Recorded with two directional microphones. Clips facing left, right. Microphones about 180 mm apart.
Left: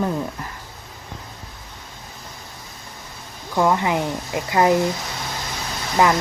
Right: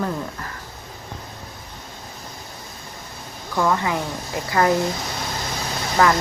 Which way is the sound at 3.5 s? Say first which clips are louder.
Left 2 dB; 20° left (ahead or behind).